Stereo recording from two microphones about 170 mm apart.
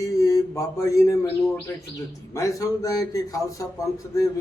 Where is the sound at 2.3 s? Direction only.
20° left (ahead or behind).